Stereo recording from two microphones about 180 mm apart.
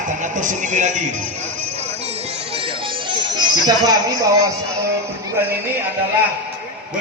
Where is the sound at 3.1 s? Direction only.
25° right (ahead or behind).